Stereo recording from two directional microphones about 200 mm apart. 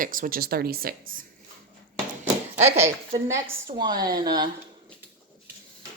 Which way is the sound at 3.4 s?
25° right (ahead or behind).